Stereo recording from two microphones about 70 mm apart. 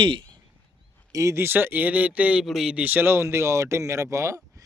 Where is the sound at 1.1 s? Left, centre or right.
Right; by 2.4 s centre.